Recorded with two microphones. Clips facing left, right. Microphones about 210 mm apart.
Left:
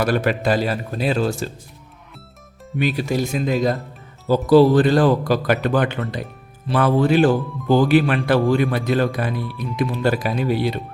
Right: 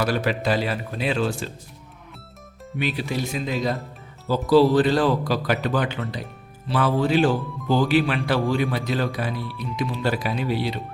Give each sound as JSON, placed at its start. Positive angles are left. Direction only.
{"t": 0.0, "sound": "speech", "side_deg": 50}
{"t": 2.7, "sound": "a man's voice", "side_deg": 45}